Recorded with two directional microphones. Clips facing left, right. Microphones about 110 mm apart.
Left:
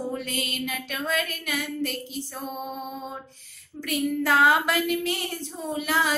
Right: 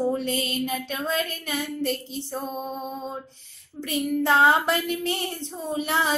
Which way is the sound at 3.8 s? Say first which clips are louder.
Right 1 dB; 25° right (ahead or behind).